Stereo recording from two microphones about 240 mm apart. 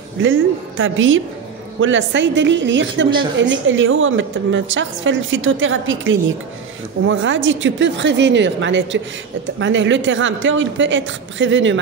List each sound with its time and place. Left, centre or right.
0.2 s a woman's voice: right